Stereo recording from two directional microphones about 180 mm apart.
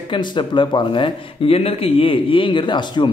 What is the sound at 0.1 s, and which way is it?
Speech, 25° left (ahead or behind).